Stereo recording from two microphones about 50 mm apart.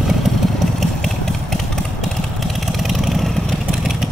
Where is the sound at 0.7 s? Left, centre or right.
Centre.